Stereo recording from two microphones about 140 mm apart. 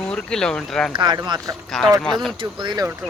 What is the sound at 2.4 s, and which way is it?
Speech, 35° right (ahead or behind).